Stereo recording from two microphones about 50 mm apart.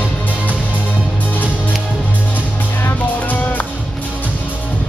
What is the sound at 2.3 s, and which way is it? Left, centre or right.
Music, left.